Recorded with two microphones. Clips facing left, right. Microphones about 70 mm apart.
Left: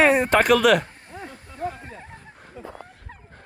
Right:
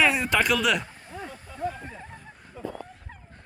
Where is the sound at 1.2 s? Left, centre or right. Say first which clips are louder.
Left 1 dB; left.